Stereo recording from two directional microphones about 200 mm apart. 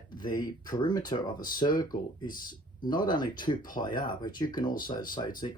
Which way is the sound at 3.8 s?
20° left (ahead or behind).